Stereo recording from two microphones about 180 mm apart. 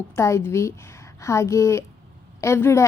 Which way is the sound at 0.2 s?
15° left (ahead or behind).